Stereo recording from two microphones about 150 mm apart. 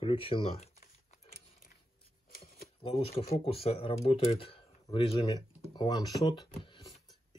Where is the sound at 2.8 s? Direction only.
40° left (ahead or behind).